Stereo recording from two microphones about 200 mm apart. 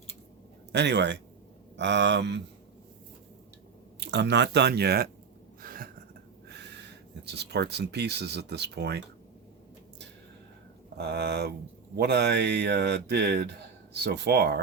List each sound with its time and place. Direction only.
0.7 s speech: 60° right (ahead or behind)
4.0 s speech: 60° right (ahead or behind)
5.6 s a sound: 45° right (ahead or behind)
7.3 s speech: 55° right (ahead or behind)
10.9 s speech: 55° right (ahead or behind)